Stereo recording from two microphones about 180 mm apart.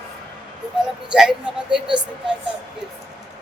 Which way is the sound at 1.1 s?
5° right (ahead or behind).